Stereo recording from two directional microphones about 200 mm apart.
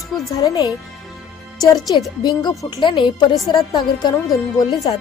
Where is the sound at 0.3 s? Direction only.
15° left (ahead or behind).